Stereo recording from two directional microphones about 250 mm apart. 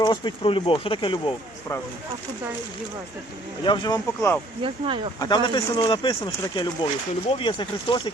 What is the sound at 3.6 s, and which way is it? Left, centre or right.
Speech, centre.